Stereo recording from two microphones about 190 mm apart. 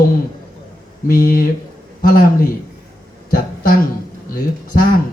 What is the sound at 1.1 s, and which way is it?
Speech, 50° left (ahead or behind).